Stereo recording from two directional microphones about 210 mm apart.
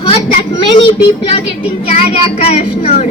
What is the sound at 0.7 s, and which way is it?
A child's voice, 25° left (ahead or behind).